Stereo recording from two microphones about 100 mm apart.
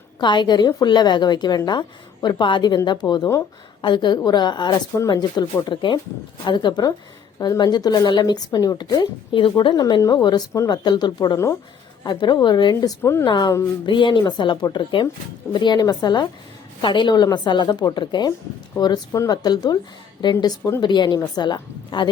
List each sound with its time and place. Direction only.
0.2 s speech: 50° left (ahead or behind)
10.0 s speech: 40° left (ahead or behind)
13.0 s a woman's voice: 25° left (ahead or behind)
13.2 s speech: 50° left (ahead or behind)